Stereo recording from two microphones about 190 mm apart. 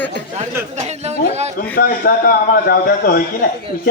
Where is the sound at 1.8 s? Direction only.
50° left (ahead or behind).